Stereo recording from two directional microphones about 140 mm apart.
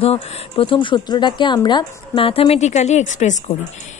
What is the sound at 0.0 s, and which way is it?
Speech, 40° left (ahead or behind).